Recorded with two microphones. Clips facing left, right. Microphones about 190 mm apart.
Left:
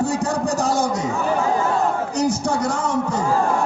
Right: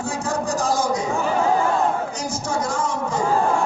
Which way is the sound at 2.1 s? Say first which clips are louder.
Left 6 dB; 65° left (ahead or behind).